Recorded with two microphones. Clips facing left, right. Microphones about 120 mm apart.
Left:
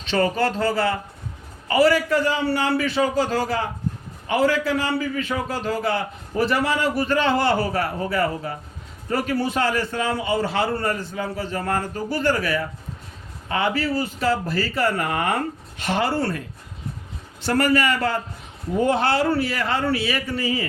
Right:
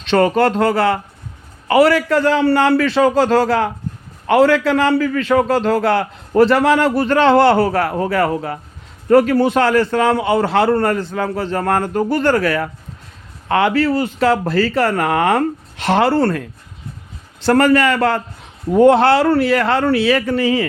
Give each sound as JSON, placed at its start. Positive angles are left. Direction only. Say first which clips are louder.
{"t": 0.0, "sound": "a man's voice", "louder": "right 7 dB", "side_deg": -65}
{"t": 17.4, "sound": "a man's voice", "louder": "right 7 dB", "side_deg": -65}